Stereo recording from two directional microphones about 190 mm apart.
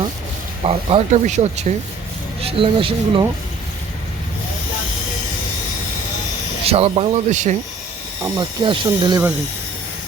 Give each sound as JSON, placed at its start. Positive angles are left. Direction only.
{"t": 0.6, "sound": "speech", "side_deg": -30}
{"t": 6.7, "sound": "speech", "side_deg": -30}
{"t": 8.4, "sound": "speech", "side_deg": -25}